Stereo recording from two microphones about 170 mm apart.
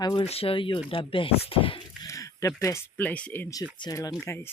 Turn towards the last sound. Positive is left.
turn(degrees=15)  # may be behind; listen again after turning